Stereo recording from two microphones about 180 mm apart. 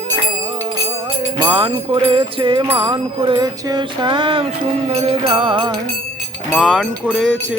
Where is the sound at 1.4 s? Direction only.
25° right (ahead or behind).